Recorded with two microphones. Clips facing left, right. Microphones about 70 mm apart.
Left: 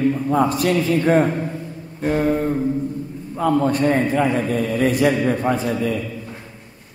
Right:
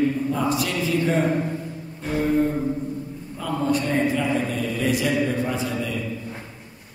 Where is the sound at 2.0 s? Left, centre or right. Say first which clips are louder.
Left 6 dB; left.